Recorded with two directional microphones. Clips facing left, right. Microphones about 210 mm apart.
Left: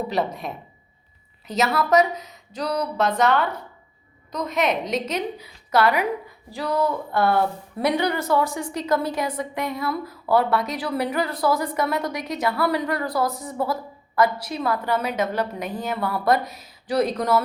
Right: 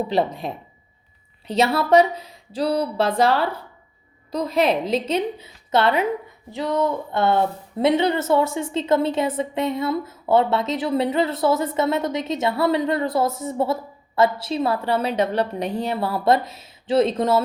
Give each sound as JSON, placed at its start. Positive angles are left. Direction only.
{"t": 0.1, "sound": "speech", "side_deg": -30}